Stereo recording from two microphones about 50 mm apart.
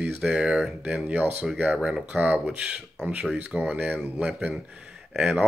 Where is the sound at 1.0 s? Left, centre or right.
Right.